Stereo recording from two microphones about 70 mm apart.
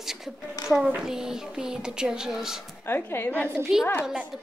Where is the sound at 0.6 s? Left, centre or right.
Left.